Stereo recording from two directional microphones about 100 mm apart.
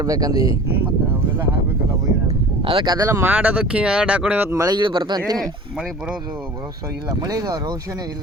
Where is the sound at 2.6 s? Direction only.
65° right (ahead or behind).